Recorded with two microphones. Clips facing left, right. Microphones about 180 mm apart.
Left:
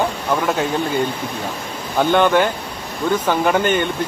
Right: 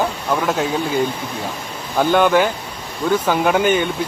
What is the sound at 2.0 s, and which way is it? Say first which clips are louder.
Speech: even; 5° right (ahead or behind).